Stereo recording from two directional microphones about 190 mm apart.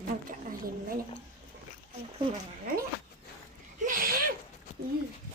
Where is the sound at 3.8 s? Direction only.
45° right (ahead or behind).